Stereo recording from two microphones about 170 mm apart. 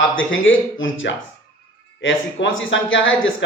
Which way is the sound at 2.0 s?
90° left.